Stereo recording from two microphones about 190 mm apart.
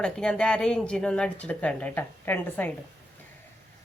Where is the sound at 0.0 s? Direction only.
5° left (ahead or behind).